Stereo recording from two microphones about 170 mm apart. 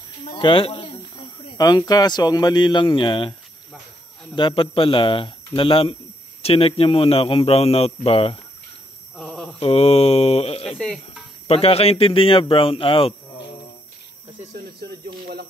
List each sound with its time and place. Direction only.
0.2 s speech: 30° left (ahead or behind)
4.4 s a man's voice: 30° left (ahead or behind)
9.1 s a sound: 5° left (ahead or behind)
9.6 s a man's voice: 35° left (ahead or behind)
10.8 s speech: 5° left (ahead or behind)
11.4 s a man's voice: 35° left (ahead or behind)
14.8 s a sound: 65° right (ahead or behind)